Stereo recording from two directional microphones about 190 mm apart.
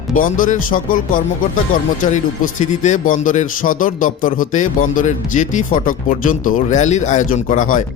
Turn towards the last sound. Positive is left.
turn(degrees=45)  # may be behind; listen again after turning